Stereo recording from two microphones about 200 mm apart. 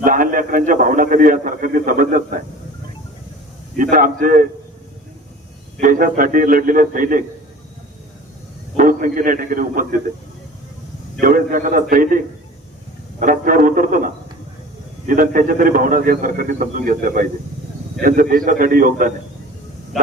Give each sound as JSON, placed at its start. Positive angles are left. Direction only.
{"t": 0.0, "sound": "a man's voice", "side_deg": -45}
{"t": 3.8, "sound": "a man's voice", "side_deg": -45}
{"t": 5.8, "sound": "a man's voice", "side_deg": -45}
{"t": 8.7, "sound": "a man's voice", "side_deg": -40}
{"t": 11.2, "sound": "a man's voice", "side_deg": -45}
{"t": 15.0, "sound": "a man's voice", "side_deg": -45}